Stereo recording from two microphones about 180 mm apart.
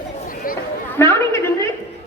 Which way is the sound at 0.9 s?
15° left (ahead or behind).